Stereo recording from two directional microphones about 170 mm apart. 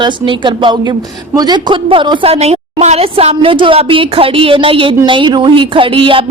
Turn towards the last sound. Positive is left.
turn(degrees=-30)  # may be behind; listen again after turning